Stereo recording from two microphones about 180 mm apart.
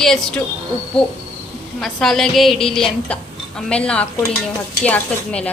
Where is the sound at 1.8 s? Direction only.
Centre (ahead or behind).